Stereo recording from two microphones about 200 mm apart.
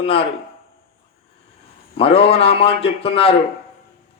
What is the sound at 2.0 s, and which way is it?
Speech, 30° left (ahead or behind).